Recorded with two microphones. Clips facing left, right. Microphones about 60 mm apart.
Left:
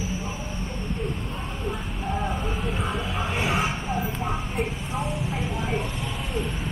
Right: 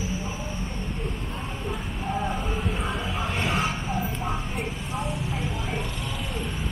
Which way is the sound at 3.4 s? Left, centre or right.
Centre.